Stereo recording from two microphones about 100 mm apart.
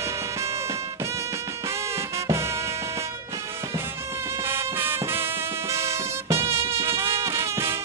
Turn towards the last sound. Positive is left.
turn(degrees=-30)  # may be behind; listen again after turning